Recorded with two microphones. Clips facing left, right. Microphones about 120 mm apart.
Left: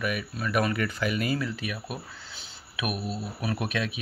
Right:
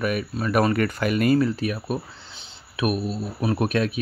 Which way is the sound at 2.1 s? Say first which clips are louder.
Right 1 dB; 25° right (ahead or behind).